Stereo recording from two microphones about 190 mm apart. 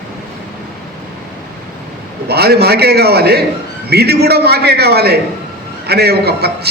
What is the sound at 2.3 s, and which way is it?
A man's voice, 60° right (ahead or behind).